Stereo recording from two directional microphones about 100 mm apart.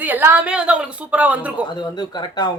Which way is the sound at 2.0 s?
45° left (ahead or behind).